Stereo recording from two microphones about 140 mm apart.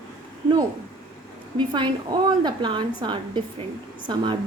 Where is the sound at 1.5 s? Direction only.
35° right (ahead or behind).